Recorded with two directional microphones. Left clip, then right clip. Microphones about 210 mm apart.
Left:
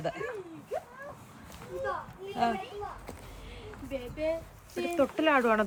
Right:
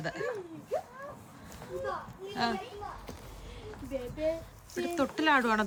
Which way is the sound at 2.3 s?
Centre (ahead or behind).